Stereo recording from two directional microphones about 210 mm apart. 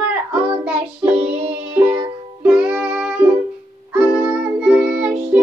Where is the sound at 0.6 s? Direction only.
5° right (ahead or behind).